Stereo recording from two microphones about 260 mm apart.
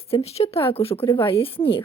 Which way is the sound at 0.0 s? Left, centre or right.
Left.